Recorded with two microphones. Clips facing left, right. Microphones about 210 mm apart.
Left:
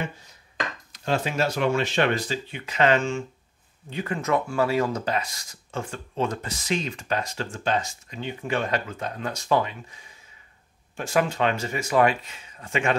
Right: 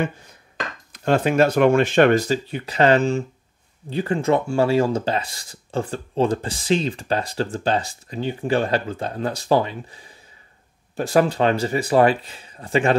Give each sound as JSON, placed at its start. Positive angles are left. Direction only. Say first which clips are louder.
{"t": 0.0, "sound": "speech", "louder": "right 8 dB", "side_deg": -55}